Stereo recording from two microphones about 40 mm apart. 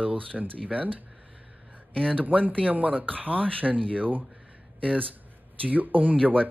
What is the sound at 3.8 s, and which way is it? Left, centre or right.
Speech, left.